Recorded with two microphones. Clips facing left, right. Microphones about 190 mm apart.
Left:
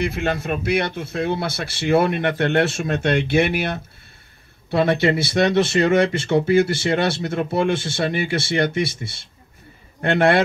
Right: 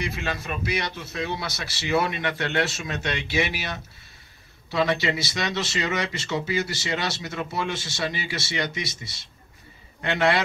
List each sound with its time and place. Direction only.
0.0 s speech: 55° left (ahead or behind)